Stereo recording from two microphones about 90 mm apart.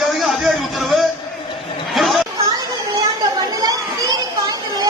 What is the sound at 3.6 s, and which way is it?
Children playing, 45° right (ahead or behind).